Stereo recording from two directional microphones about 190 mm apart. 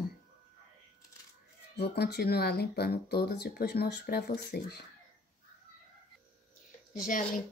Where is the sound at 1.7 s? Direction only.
60° left (ahead or behind).